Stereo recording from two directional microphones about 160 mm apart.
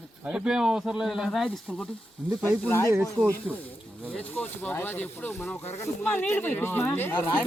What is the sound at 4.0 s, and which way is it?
Speech, 10° left (ahead or behind).